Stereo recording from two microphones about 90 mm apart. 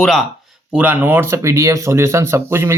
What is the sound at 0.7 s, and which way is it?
Speech, 15° right (ahead or behind).